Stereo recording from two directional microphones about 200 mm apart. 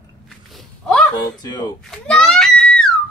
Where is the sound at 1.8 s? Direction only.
5° left (ahead or behind).